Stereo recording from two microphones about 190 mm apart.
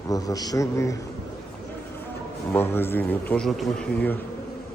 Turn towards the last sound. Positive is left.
turn(degrees=0)  # may be behind; listen again after turning